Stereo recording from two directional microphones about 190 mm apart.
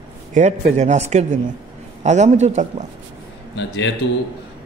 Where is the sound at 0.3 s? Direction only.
40° right (ahead or behind).